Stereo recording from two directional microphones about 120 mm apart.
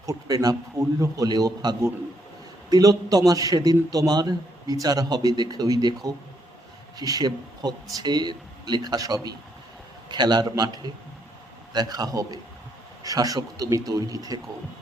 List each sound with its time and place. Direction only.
0.0 s a man's voice: 30° right (ahead or behind)